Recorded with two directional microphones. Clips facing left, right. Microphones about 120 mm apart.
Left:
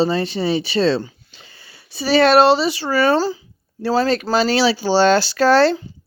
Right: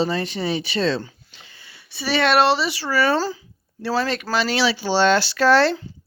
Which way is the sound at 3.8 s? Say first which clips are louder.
Left 5 dB; 30° left (ahead or behind).